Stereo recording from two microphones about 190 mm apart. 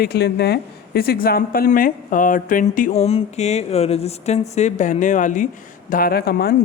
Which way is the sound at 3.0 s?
35° left (ahead or behind).